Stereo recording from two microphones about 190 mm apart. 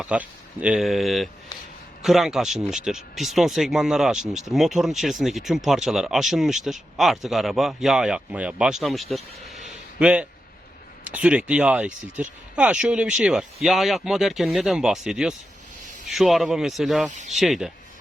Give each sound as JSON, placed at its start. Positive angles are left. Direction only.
{"t": 0.0, "sound": "speech", "side_deg": -5}
{"t": 17.1, "sound": "speech", "side_deg": -40}
{"t": 17.3, "sound": "speech", "side_deg": 0}